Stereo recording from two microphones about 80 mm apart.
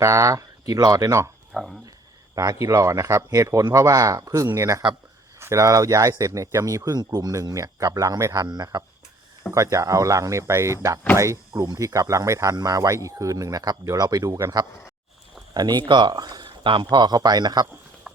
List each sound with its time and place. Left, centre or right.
0.0 s speech: right
1.5 s speech: centre
2.3 s speech: right
8.4 s speech: right
9.5 s speech: right
15.5 s speech: right